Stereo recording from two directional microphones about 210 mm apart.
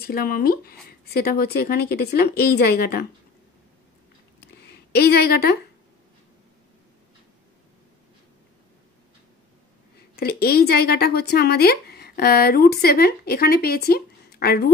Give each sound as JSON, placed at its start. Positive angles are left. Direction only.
{"t": 0.0, "sound": "speech", "side_deg": 45}
{"t": 4.4, "sound": "a sound", "side_deg": 50}
{"t": 10.1, "sound": "speech", "side_deg": 45}